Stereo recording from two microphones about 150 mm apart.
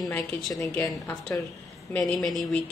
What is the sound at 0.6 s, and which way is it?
Speech, 15° left (ahead or behind).